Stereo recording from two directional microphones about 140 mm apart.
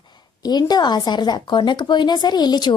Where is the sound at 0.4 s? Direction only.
30° left (ahead or behind).